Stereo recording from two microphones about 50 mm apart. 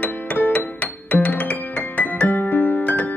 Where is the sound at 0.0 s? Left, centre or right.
Left.